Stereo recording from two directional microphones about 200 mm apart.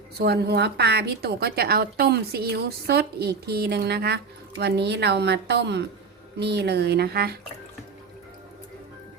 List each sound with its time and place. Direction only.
0.2 s a woman's voice: 55° right (ahead or behind)